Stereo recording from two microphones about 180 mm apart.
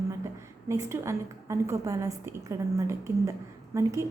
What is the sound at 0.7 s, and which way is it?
A woman's voice, 15° right (ahead or behind).